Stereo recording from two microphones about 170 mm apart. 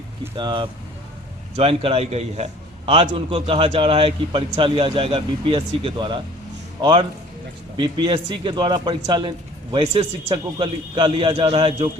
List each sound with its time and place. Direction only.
0.3 s a man's voice: 25° right (ahead or behind)